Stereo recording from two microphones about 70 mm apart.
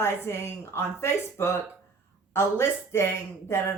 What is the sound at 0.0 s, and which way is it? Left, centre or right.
Speech, left.